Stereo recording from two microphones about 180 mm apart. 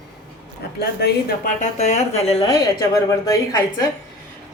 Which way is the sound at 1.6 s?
40° left (ahead or behind).